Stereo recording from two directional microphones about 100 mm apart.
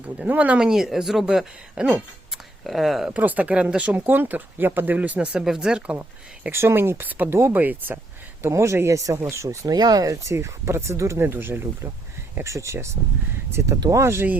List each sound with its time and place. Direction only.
0.0 s speech: 15° right (ahead or behind)
3.1 s speech: 15° right (ahead or behind)
6.5 s speech: 25° right (ahead or behind)
9.7 s speech: 40° right (ahead or behind)
13.7 s speech: 40° right (ahead or behind)
14.0 s speech: 25° right (ahead or behind)